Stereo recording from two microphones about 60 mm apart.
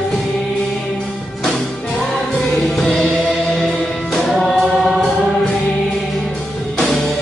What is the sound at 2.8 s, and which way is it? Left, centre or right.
Music, centre.